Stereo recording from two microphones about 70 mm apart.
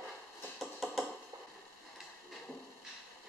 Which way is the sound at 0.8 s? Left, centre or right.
Centre.